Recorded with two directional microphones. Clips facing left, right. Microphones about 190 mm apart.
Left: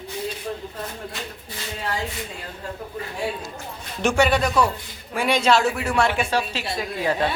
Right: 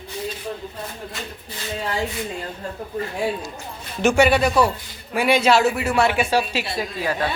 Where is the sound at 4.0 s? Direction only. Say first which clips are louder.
Right 3 dB; 5° right (ahead or behind).